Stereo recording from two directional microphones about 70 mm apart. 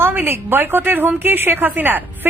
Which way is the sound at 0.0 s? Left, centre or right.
Right.